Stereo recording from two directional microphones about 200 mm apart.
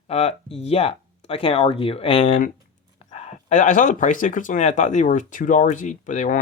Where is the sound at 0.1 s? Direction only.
30° left (ahead or behind).